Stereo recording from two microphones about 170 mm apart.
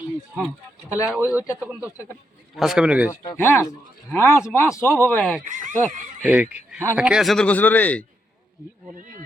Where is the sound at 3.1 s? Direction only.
15° left (ahead or behind).